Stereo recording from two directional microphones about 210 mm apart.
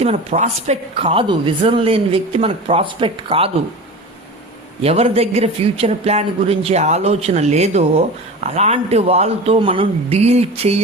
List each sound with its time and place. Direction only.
0.0 s speech: 30° right (ahead or behind)
4.8 s speech: 30° right (ahead or behind)